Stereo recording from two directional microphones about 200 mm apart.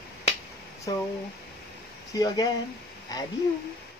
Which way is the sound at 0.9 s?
20° left (ahead or behind).